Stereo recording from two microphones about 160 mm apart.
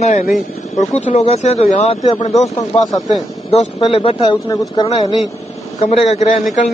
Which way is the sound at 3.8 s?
35° left (ahead or behind).